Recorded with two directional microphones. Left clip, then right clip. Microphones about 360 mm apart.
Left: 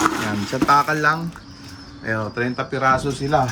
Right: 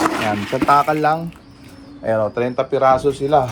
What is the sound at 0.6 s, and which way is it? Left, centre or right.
Speech, right.